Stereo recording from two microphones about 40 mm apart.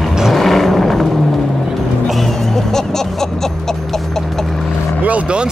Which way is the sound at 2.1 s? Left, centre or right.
Centre.